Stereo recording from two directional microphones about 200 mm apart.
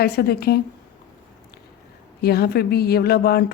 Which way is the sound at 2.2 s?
50° left (ahead or behind).